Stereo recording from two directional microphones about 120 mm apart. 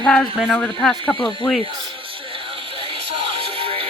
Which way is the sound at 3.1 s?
50° right (ahead or behind).